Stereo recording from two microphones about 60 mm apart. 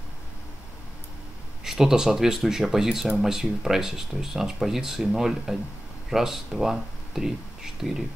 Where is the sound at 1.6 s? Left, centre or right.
Centre.